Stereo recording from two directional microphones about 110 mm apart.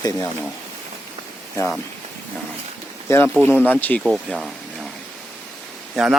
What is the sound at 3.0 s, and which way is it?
Speech, 25° left (ahead or behind).